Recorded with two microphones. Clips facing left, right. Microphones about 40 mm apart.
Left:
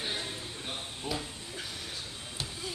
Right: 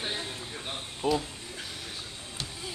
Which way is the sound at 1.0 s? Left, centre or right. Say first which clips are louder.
Right 9 dB; right.